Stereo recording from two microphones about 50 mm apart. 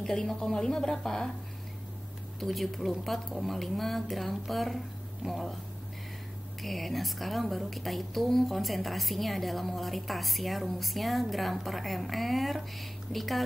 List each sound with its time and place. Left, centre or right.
0.0 s a woman's voice: centre
2.4 s a woman's voice: centre
6.6 s a woman's voice: centre